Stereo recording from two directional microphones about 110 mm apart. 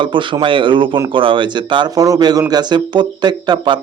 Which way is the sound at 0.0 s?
50° right (ahead or behind).